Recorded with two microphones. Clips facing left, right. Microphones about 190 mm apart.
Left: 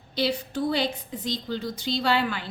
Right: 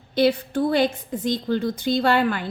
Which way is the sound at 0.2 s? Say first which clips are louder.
Right 7 dB; 55° right (ahead or behind).